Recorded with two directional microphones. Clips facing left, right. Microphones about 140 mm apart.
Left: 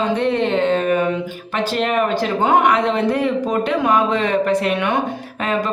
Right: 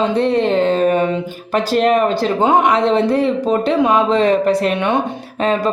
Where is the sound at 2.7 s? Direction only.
30° right (ahead or behind).